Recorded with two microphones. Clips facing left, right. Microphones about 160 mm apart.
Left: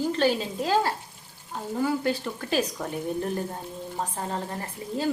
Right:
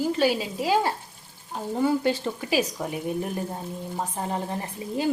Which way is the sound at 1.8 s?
25° right (ahead or behind).